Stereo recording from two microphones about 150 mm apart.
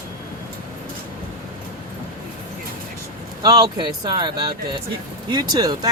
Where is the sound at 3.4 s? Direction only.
25° right (ahead or behind).